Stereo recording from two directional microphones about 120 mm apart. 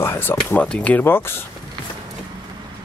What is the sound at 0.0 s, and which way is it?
Speech, 20° left (ahead or behind).